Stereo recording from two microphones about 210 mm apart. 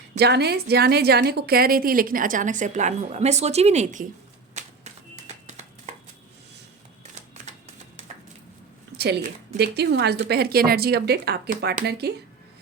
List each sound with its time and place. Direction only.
0.2 s a woman's voice: 50° right (ahead or behind); by 4.0 s 30° right (ahead or behind)
4.6 s a sound: 35° right (ahead or behind)
9.0 s a woman's voice: 50° right (ahead or behind)